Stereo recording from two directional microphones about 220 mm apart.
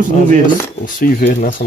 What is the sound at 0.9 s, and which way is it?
Speech, 40° left (ahead or behind).